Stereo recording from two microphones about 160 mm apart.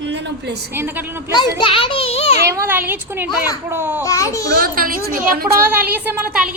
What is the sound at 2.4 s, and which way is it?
Speech, 15° right (ahead or behind).